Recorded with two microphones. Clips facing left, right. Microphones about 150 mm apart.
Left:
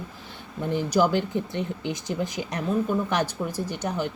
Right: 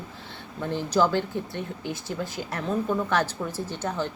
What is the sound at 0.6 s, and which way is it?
Speech, 15° left (ahead or behind).